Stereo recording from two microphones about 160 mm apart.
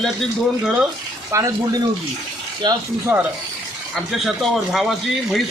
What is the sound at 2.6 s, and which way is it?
Speech, 30° right (ahead or behind).